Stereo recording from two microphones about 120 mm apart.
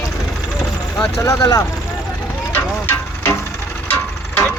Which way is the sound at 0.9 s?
25° left (ahead or behind).